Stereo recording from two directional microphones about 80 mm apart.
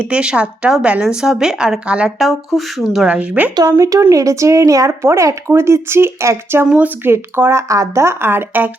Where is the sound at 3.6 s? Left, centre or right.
Right.